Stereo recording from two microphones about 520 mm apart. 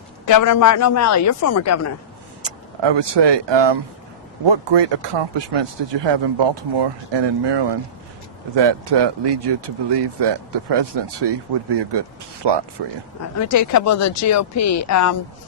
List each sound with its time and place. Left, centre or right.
0.3 s speech: left
2.4 s speech: right
13.3 s speech: left